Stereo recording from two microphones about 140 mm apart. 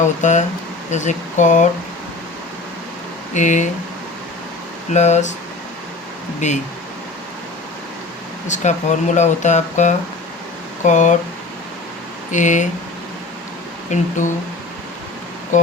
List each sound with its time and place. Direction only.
0.0 s speech: 60° left (ahead or behind)
3.3 s speech: 60° left (ahead or behind)
4.9 s speech: 55° left (ahead or behind)
6.4 s speech: 60° left (ahead or behind)
8.4 s speech: 60° left (ahead or behind)
12.3 s speech: 60° left (ahead or behind)
13.9 s speech: 60° left (ahead or behind)
15.5 s speech: 60° left (ahead or behind)